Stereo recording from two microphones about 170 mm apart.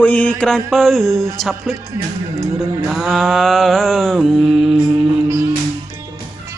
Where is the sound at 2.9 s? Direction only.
Centre (ahead or behind).